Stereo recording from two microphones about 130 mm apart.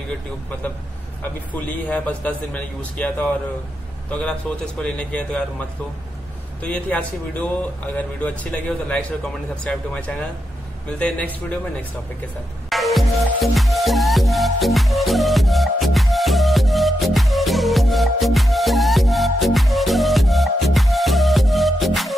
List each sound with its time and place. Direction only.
1.5 s speech: 10° left (ahead or behind)
6.6 s speech: 10° left (ahead or behind)
12.6 s music: centre (ahead or behind)